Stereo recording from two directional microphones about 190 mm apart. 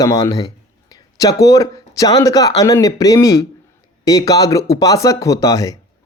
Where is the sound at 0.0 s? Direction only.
15° left (ahead or behind).